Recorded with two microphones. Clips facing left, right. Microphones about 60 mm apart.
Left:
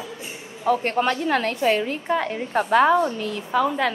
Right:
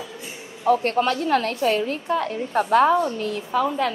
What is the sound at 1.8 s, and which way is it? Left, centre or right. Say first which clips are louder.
Speech: even; left.